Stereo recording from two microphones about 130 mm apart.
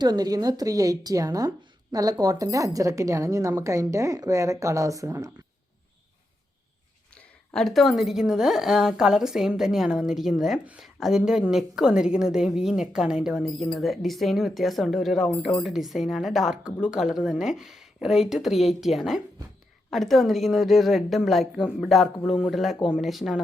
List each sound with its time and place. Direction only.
0.0 s a woman's voice: 30° right (ahead or behind)
7.2 s a woman's voice: 5° left (ahead or behind)